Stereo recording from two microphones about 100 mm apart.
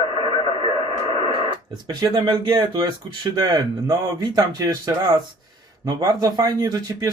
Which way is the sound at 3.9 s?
40° right (ahead or behind).